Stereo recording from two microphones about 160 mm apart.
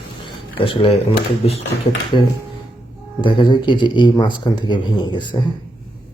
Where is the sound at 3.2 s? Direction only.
30° left (ahead or behind).